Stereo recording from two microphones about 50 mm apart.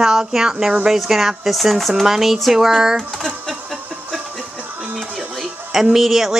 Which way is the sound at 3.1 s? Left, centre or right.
Centre.